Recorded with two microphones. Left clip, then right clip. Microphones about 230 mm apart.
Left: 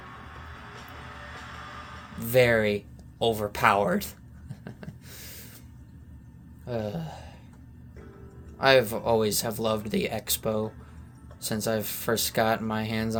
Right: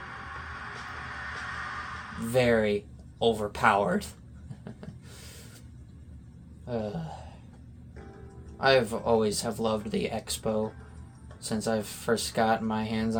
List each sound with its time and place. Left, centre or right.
2.3 s speech: left
4.6 s a sound: left
6.7 s speech: left
8.5 s speech: left